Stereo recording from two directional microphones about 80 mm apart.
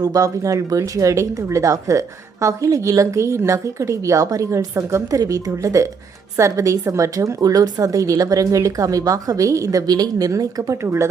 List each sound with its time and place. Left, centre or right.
0.0 s speech: right
10.8 s speech: right